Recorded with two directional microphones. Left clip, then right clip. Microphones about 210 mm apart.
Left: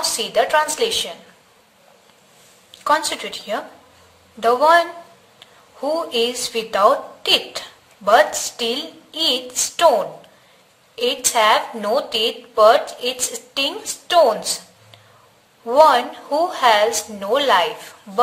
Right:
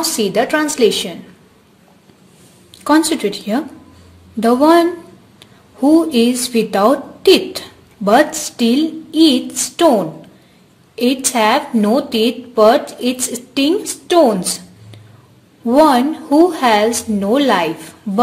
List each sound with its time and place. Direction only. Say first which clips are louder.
0.0 s a woman's voice: right 3 dB; 30° right (ahead or behind)
2.7 s a woman's voice: right 5 dB; 30° right (ahead or behind)
5.4 s a sound: right 8 dB; 30° right (ahead or behind)
6.3 s a woman's voice: right 5 dB; 30° right (ahead or behind)